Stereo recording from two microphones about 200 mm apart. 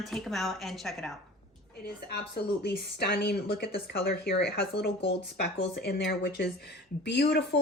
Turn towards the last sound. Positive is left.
turn(degrees=55)  # may be behind; listen again after turning